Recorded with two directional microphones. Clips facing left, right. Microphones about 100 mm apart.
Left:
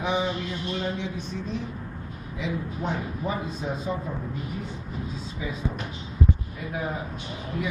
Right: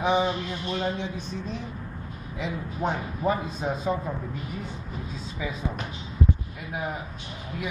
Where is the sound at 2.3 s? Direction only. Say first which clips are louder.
Left 1 dB; 45° right (ahead or behind).